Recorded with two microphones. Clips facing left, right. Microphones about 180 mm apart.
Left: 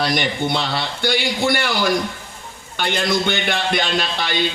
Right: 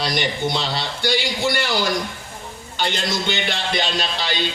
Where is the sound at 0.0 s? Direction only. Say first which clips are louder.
Left 2 dB; 55° left (ahead or behind).